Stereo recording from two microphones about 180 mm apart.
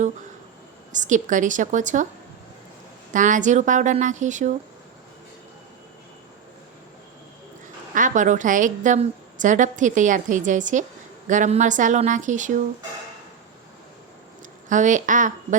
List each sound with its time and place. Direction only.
0.9 s a woman's voice: 45° right (ahead or behind)
3.1 s a woman's voice: 45° right (ahead or behind)
7.9 s a woman's voice: 45° right (ahead or behind)
14.7 s a woman's voice: 45° right (ahead or behind)